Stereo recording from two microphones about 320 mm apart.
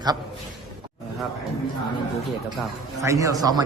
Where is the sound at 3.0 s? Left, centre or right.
Centre.